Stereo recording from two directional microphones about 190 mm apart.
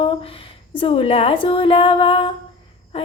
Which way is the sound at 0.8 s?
30° left (ahead or behind).